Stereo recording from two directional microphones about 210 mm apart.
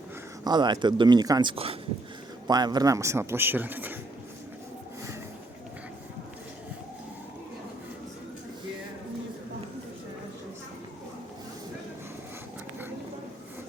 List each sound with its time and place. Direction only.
0.4 s speech: 20° right (ahead or behind)